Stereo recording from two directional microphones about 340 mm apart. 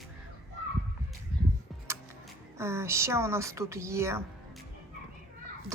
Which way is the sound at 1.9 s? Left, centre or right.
Centre.